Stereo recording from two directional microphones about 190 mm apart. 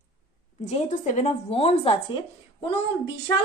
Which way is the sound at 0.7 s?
40° left (ahead or behind).